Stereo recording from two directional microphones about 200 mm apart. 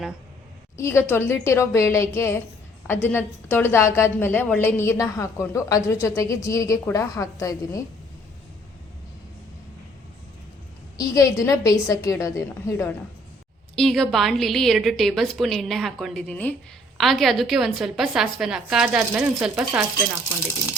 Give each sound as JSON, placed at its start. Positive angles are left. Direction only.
{"t": 0.8, "sound": "a woman's voice", "side_deg": 15}
{"t": 10.9, "sound": "a woman's voice", "side_deg": 15}
{"t": 13.7, "sound": "a woman's voice", "side_deg": 0}